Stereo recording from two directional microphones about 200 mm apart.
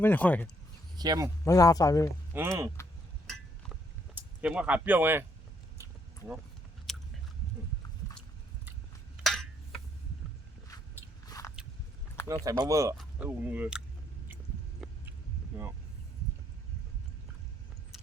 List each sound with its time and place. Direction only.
0.0 s speech: 10° left (ahead or behind)
0.9 s speech: 20° right (ahead or behind)
1.5 s speech: 15° left (ahead or behind)
2.3 s speech: 15° right (ahead or behind)
4.1 s speech: 5° right (ahead or behind)
6.9 s biting: centre (ahead or behind)
9.2 s a sound: centre (ahead or behind)
11.3 s biting: 15° left (ahead or behind)
12.5 s speech: 15° right (ahead or behind)